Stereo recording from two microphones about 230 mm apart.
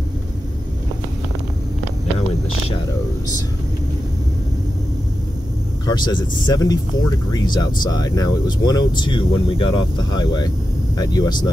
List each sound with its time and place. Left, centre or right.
5.9 s speech: centre